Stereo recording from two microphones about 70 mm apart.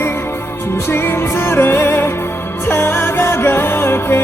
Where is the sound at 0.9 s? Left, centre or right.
Left.